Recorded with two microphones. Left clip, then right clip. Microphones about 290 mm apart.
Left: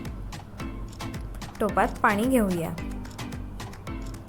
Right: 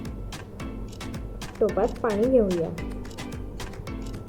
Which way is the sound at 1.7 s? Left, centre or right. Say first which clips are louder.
Left 2 dB; left.